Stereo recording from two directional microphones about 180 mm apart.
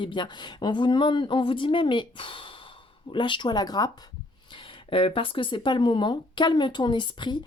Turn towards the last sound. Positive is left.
turn(degrees=25)  # may be behind; listen again after turning